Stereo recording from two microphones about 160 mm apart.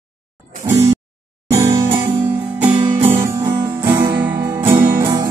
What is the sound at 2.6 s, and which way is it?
Music, 30° right (ahead or behind).